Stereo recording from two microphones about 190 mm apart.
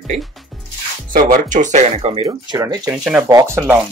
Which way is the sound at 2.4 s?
20° right (ahead or behind).